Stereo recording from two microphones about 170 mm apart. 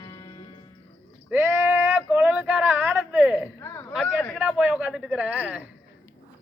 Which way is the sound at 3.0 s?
Centre (ahead or behind).